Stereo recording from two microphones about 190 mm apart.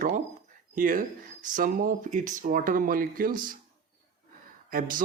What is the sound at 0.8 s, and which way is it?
Speech, 45° right (ahead or behind).